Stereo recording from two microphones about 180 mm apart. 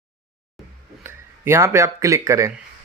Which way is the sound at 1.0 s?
15° right (ahead or behind).